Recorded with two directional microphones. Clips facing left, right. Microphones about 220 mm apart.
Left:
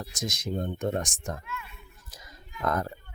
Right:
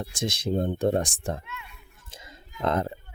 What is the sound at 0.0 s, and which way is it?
Speech, 30° right (ahead or behind).